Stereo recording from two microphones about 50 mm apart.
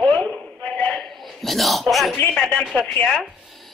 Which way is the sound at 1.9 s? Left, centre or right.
Centre.